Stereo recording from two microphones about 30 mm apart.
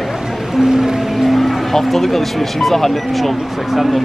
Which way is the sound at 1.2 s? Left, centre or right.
Centre.